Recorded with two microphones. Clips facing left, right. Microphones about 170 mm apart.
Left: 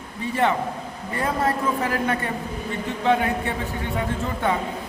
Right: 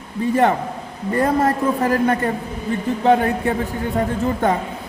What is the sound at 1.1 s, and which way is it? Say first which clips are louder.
A woman's voice: right 6 dB; 40° right (ahead or behind).